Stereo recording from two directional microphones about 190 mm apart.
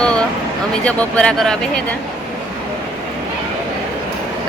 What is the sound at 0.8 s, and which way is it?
Speech, 5° left (ahead or behind).